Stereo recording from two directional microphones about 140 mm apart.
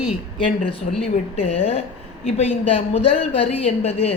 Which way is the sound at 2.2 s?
45° left (ahead or behind).